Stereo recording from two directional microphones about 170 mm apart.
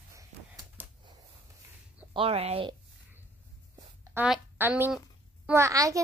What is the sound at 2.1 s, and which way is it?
Speech, 35° right (ahead or behind).